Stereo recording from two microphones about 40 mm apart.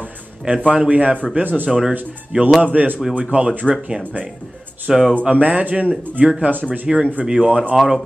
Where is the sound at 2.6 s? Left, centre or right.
Right.